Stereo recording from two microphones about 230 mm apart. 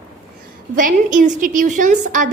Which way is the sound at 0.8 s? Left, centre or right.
Right.